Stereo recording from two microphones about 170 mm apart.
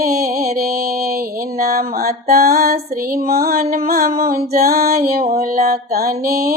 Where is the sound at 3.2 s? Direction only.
60° right (ahead or behind).